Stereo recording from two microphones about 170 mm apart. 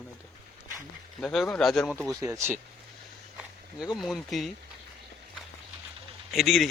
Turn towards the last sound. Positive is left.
turn(degrees=0)  # may be behind; listen again after turning